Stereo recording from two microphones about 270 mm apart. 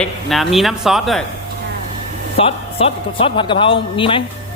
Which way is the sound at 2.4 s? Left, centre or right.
Left.